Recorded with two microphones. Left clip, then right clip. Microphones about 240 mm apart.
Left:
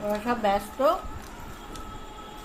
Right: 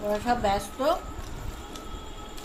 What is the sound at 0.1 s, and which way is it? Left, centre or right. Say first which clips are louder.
Speech: even; left.